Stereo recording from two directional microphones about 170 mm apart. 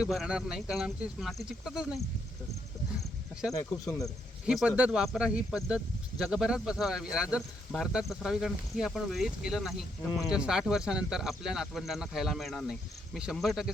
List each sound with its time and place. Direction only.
0.0 s speech: 5° right (ahead or behind)
3.8 s speech: 20° left (ahead or behind)
4.4 s speech: 5° right (ahead or behind)